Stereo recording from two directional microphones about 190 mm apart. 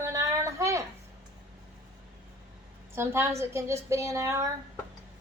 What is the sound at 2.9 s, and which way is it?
A woman's voice, 15° right (ahead or behind).